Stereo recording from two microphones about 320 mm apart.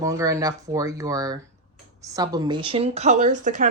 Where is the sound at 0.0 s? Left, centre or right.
Centre.